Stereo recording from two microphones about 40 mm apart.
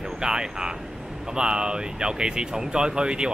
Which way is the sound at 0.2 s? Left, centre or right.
Centre.